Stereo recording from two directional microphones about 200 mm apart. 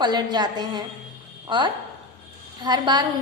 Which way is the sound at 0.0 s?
20° right (ahead or behind).